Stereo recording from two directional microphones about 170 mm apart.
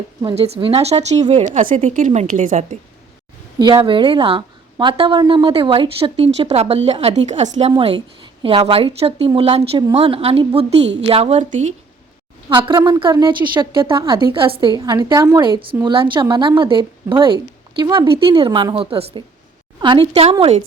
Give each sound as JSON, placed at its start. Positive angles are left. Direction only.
{"t": 0.2, "sound": "a woman's voice", "side_deg": -35}
{"t": 3.6, "sound": "a woman's voice", "side_deg": -30}
{"t": 7.8, "sound": "a woman's voice", "side_deg": -30}
{"t": 12.5, "sound": "a woman's voice", "side_deg": -30}